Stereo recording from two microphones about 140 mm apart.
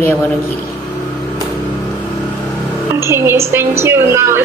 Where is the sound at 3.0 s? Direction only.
20° right (ahead or behind).